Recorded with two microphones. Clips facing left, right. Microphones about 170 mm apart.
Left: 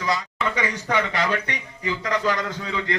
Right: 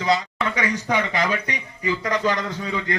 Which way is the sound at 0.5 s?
10° right (ahead or behind).